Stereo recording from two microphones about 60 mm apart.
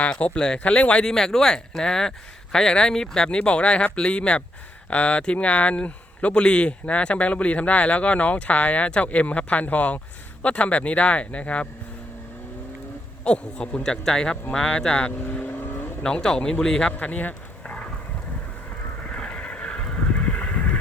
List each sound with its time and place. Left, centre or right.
0.0 s a man's voice: left
1.0 s a man's voice: centre
13.2 s speech: centre
15.2 s vehicle: left
16.0 s speech: centre
16.9 s speech: left
19.0 s neigh: centre